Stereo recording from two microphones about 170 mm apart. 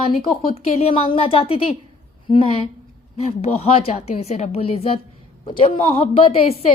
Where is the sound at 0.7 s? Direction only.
35° left (ahead or behind).